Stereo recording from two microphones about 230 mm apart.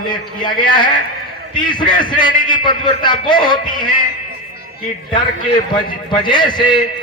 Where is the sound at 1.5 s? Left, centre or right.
Centre.